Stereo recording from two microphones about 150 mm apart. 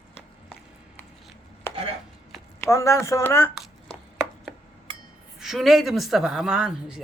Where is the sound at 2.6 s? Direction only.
20° left (ahead or behind).